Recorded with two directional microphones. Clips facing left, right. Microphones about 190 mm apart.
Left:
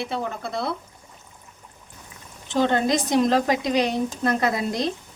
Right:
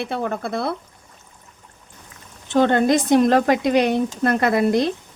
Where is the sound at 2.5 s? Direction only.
55° right (ahead or behind).